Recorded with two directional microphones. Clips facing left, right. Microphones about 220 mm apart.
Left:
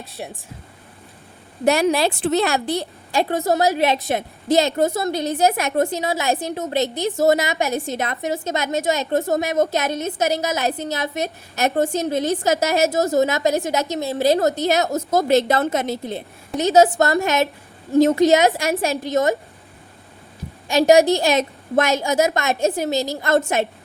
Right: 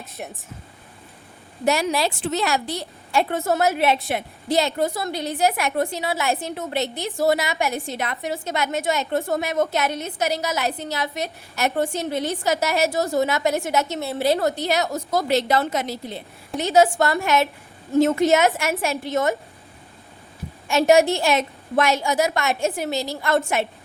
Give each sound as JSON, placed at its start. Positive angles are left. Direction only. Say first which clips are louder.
{"t": 1.6, "sound": "speech", "louder": "left 4 dB", "side_deg": 55}
{"t": 3.5, "sound": "a woman's voice", "louder": "left 1 dB", "side_deg": 35}
{"t": 20.7, "sound": "a woman's voice", "louder": "left 3 dB", "side_deg": 35}